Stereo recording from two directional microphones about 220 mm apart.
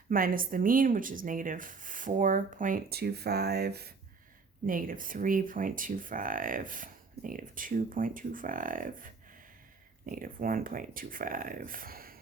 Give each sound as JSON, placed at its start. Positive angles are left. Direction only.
{"t": 0.1, "sound": "speech", "side_deg": -40}